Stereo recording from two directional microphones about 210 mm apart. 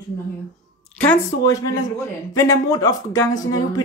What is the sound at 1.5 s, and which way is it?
A man's voice, 15° left (ahead or behind).